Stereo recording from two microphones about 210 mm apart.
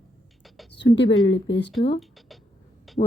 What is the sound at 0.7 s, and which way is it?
Speech, 55° left (ahead or behind).